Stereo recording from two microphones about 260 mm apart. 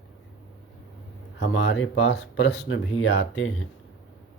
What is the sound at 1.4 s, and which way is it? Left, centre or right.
Speech, left.